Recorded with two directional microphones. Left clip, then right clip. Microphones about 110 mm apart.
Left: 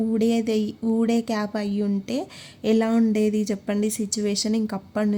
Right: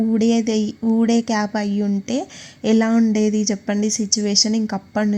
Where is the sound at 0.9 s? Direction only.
20° right (ahead or behind).